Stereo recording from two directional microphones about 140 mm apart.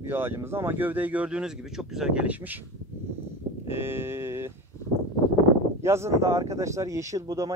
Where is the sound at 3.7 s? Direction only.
15° right (ahead or behind).